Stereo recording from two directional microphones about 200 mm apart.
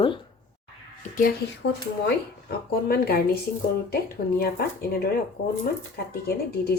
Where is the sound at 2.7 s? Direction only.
50° left (ahead or behind).